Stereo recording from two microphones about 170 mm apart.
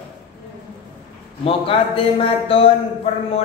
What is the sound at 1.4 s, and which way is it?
Speech, 35° left (ahead or behind).